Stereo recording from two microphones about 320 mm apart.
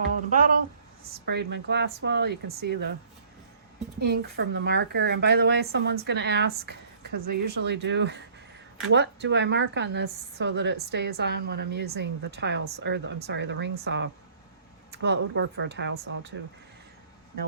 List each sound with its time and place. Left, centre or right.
0.3 s a woman's voice: right
4.0 s a woman's voice: right